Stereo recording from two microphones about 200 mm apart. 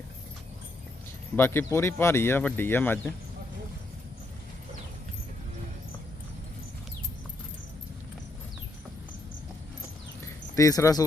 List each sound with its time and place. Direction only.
1.4 s speech: 10° left (ahead or behind)
10.5 s speech: 15° left (ahead or behind)